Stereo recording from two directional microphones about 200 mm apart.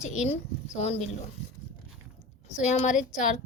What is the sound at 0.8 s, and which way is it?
Speech, 35° left (ahead or behind).